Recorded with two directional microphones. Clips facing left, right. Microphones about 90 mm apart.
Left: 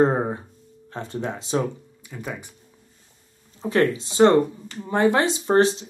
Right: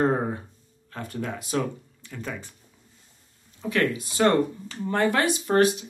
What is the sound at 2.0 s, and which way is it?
Speech, 15° left (ahead or behind).